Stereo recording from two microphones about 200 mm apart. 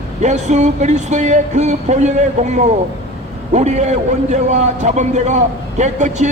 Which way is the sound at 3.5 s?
35° right (ahead or behind).